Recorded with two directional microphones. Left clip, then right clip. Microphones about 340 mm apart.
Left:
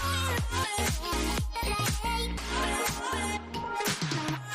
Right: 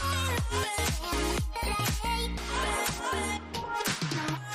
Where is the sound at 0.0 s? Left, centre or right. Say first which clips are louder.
Even; centre.